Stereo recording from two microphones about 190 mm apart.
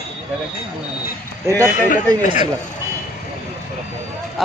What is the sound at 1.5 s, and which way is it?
Speech, 15° right (ahead or behind).